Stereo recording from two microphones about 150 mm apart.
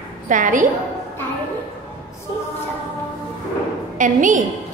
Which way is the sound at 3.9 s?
60° right (ahead or behind).